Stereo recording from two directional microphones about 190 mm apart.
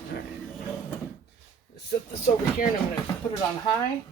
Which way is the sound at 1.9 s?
50° left (ahead or behind).